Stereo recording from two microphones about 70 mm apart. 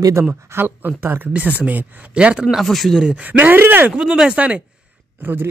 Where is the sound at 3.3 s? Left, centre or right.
Right.